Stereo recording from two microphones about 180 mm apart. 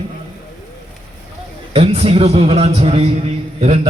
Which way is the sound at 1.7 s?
35° right (ahead or behind).